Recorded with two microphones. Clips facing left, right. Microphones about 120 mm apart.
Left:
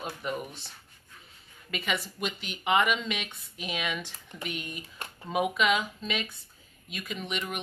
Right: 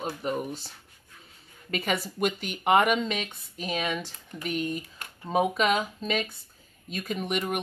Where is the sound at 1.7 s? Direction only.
40° right (ahead or behind).